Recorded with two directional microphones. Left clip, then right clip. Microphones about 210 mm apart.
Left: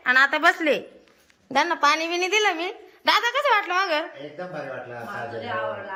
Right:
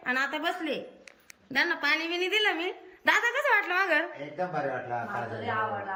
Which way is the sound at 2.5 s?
Centre (ahead or behind).